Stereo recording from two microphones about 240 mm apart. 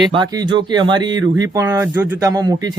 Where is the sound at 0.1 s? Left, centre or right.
Centre.